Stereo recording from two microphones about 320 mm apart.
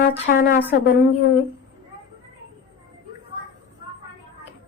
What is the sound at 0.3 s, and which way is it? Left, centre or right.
Speech, left.